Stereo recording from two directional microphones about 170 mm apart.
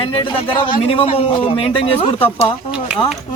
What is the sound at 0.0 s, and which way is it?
A man's voice, 30° left (ahead or behind).